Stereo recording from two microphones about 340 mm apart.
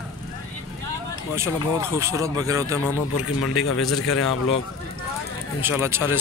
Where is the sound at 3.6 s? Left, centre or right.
Left.